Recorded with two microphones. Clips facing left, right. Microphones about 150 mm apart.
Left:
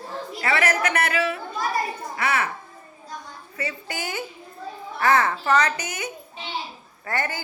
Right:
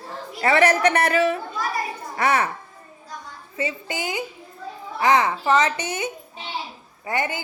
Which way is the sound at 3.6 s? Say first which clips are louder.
Right 4 dB; 20° right (ahead or behind).